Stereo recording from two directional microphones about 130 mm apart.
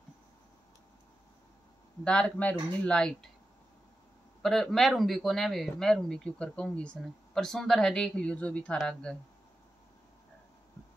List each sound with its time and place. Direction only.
2.0 s speech: 10° left (ahead or behind)
4.4 s speech: 5° left (ahead or behind)